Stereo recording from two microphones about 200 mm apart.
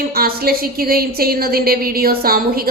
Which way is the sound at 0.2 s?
50° right (ahead or behind).